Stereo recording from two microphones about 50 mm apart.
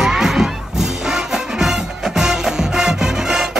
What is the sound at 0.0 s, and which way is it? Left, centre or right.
Music, centre.